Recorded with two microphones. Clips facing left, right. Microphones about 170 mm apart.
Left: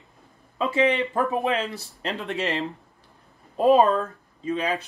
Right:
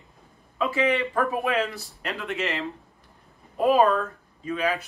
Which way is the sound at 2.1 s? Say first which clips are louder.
Left 2 dB; 35° left (ahead or behind).